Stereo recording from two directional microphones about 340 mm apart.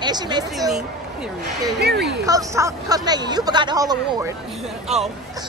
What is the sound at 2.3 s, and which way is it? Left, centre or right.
Speech, centre.